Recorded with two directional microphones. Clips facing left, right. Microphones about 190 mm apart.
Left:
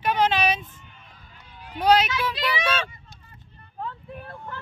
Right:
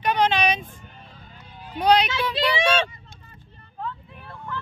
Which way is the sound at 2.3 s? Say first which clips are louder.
Right 5 dB; 30° right (ahead or behind).